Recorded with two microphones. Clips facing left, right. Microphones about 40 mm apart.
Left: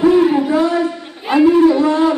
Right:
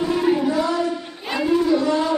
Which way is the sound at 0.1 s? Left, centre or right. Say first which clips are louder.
Left 7 dB; centre.